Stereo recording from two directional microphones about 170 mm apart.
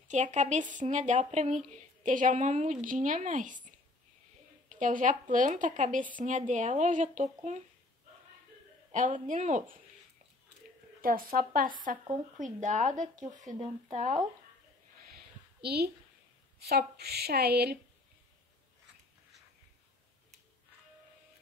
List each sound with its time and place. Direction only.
0.1 s a woman's voice: 45° right (ahead or behind)
8.9 s a woman's voice: 50° right (ahead or behind)
11.0 s a woman's voice: 60° right (ahead or behind)
15.6 s a woman's voice: 70° right (ahead or behind)